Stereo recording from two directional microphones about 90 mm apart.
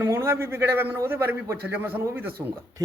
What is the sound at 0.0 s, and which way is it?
A man's voice, 30° right (ahead or behind).